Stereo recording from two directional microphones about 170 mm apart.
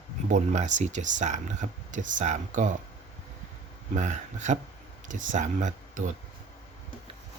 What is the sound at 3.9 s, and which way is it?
Speech, 45° right (ahead or behind).